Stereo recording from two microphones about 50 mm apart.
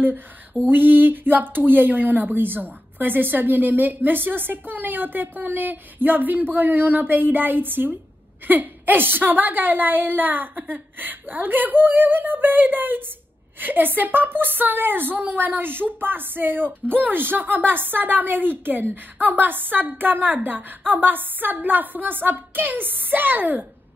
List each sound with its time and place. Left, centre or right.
0.7 s a woman's voice: right